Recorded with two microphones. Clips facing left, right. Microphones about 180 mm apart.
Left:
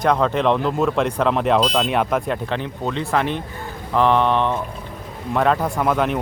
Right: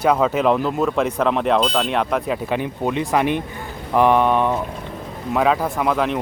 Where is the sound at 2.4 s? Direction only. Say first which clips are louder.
Right 3 dB; 10° right (ahead or behind).